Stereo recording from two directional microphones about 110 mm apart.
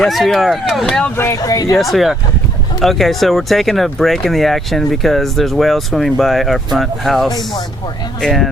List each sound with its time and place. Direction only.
0.0 s speech: centre (ahead or behind)
1.1 s speech: 25° left (ahead or behind)
1.8 s speech: centre (ahead or behind)